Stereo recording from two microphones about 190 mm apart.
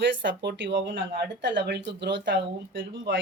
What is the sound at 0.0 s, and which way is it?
Speech, 70° right (ahead or behind).